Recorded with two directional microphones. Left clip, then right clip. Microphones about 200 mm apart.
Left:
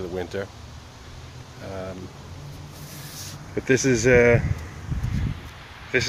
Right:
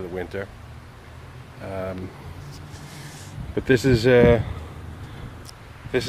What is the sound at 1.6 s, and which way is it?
Speech, 30° right (ahead or behind).